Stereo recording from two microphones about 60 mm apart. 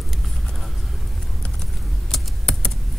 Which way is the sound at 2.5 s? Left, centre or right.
Centre.